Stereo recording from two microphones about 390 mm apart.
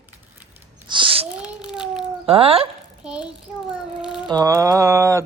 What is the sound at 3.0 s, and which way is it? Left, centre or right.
Child singing, centre.